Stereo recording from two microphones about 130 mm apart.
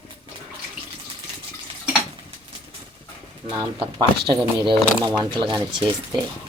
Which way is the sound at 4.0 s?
35° right (ahead or behind).